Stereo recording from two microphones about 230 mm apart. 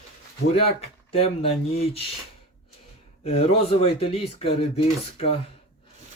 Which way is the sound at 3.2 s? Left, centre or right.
Left.